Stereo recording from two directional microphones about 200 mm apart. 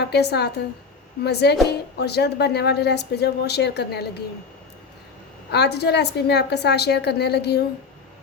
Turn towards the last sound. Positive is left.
turn(degrees=55)  # may be behind; listen again after turning